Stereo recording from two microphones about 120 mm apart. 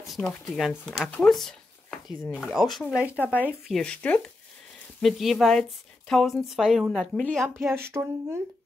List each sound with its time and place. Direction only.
0.5 s a woman's voice: centre (ahead or behind)
2.2 s speech: 10° left (ahead or behind)
2.7 s speech: 5° right (ahead or behind)
3.6 s speech: 5° left (ahead or behind)
5.0 s a woman's voice: centre (ahead or behind)
7.7 s speech: 20° right (ahead or behind)